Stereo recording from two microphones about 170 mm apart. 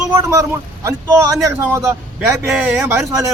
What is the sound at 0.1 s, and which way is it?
A man's voice, 15° right (ahead or behind).